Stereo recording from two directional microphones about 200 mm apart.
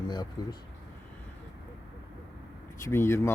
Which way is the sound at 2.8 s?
15° left (ahead or behind).